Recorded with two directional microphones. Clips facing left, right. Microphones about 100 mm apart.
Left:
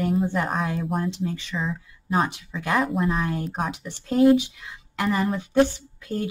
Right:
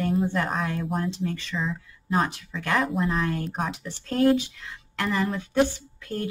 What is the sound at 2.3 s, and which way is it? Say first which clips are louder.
Speech: left 1 dB; 15° left (ahead or behind).